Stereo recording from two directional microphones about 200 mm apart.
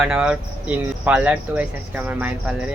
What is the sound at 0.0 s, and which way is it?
Speech, 5° right (ahead or behind).